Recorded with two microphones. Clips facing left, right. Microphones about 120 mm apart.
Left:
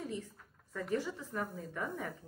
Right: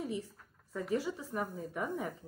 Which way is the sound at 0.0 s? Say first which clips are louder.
Right 3 dB; 10° right (ahead or behind).